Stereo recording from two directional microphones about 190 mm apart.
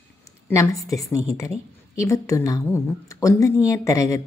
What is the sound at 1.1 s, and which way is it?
A woman's voice, 15° left (ahead or behind).